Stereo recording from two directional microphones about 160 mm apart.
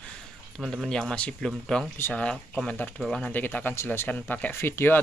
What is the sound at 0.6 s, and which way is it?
Speech, 5° right (ahead or behind).